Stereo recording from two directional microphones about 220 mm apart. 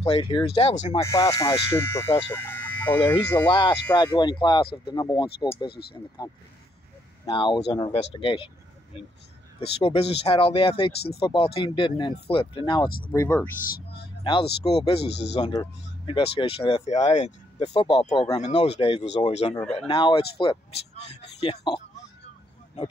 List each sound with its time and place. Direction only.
0.0 s speech: 25° left (ahead or behind)
1.0 s speech: 15° left (ahead or behind)
2.3 s a sound: 10° left (ahead or behind)
3.1 s speech: 10° left (ahead or behind)
3.4 s speech: 20° left (ahead or behind)
5.7 s speech: 45° left (ahead or behind)
6.2 s speech: 20° left (ahead or behind)
9.6 s speech: 25° left (ahead or behind); by 13.5 s 10° left (ahead or behind)
14.6 s speech: 20° left (ahead or behind)
15.0 s speech: 50° left (ahead or behind)
15.5 s speech: 20° left (ahead or behind)
18.4 s speech: 30° left (ahead or behind)